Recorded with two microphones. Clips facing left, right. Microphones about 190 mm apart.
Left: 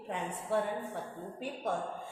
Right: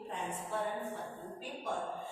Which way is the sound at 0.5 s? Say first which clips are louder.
Left 7 dB; 70° left (ahead or behind).